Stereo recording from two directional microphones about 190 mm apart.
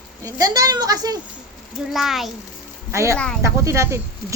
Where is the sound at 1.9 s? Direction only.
Centre (ahead or behind).